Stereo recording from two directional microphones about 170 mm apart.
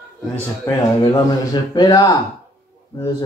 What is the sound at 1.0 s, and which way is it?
Speech, 30° left (ahead or behind).